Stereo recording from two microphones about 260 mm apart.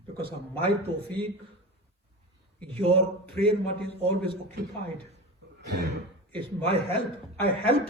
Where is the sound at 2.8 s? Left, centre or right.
Right.